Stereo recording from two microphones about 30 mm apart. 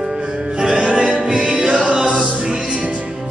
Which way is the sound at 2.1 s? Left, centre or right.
Right.